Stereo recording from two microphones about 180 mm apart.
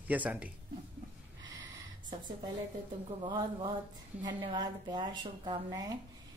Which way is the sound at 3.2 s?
25° right (ahead or behind).